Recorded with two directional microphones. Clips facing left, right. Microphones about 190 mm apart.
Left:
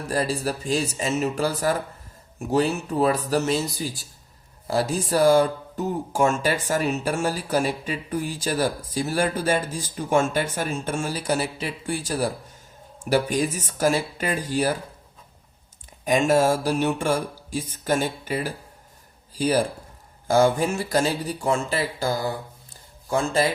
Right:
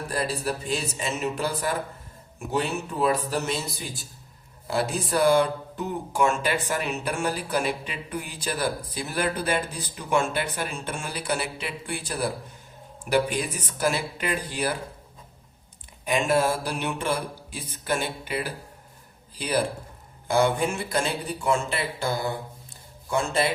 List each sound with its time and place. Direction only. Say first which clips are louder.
0.1 s speech: left 4 dB; 40° left (ahead or behind)
5.1 s speech: left 3 dB; 40° left (ahead or behind)
16.0 s speech: left 4 dB; 40° left (ahead or behind)